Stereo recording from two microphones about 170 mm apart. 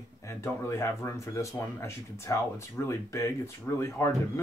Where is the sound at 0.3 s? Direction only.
15° left (ahead or behind).